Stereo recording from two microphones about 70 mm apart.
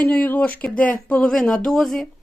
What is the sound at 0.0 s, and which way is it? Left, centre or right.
Speech, centre.